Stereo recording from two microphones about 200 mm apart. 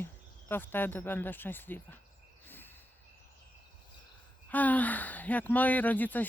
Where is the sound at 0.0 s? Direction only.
10° left (ahead or behind).